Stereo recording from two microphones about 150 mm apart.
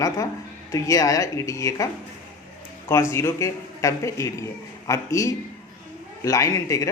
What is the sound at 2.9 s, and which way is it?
Speech, 15° left (ahead or behind).